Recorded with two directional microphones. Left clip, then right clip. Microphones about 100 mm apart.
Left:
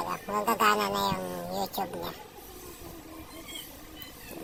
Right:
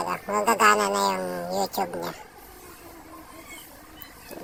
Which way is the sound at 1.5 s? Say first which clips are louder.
Right 6 dB; 80° right.